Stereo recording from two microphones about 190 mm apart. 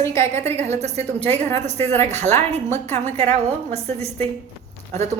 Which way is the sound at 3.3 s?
35° right (ahead or behind).